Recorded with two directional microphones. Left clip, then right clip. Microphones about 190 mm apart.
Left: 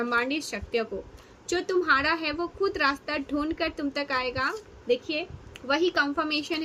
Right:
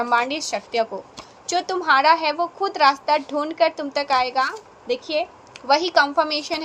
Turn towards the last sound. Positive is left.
turn(degrees=10)  # may be behind; listen again after turning